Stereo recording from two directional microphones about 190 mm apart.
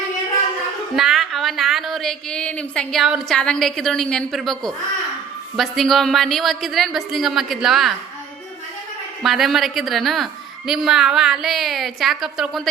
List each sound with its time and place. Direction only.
0.9 s a woman's voice: centre (ahead or behind)
9.2 s a woman's voice: centre (ahead or behind)